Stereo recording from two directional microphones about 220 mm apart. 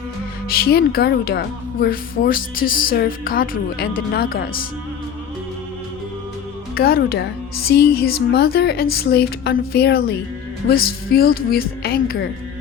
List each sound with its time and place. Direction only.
0.4 s a woman's voice: 45° left (ahead or behind)
6.7 s a woman's voice: 45° left (ahead or behind)